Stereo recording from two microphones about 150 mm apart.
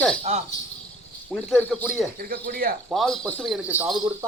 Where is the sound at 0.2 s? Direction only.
50° right (ahead or behind).